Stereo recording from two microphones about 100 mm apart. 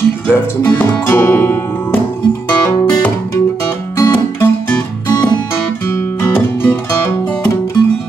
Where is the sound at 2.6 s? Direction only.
35° left (ahead or behind).